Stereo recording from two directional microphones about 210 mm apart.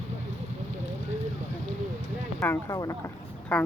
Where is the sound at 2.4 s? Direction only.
15° left (ahead or behind).